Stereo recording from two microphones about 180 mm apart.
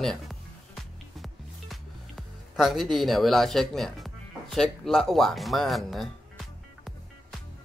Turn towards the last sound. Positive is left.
turn(degrees=0)  # may be behind; listen again after turning